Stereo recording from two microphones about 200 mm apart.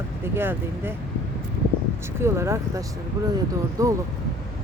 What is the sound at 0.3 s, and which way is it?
Speech, 10° right (ahead or behind).